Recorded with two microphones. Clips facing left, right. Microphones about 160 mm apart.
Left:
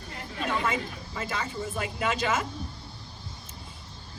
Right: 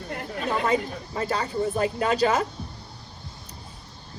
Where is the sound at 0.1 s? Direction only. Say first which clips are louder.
Right 4 dB; 55° right (ahead or behind).